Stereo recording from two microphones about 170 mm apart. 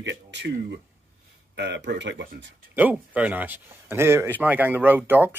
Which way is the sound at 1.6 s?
90° right.